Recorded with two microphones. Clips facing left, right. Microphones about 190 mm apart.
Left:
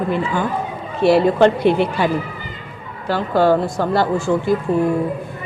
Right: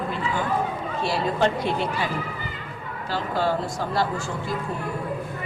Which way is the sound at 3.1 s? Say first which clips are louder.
Left 9 dB; 65° left (ahead or behind).